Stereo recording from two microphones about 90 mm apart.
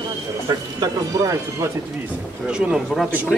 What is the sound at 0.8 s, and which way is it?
Speech, 40° right (ahead or behind).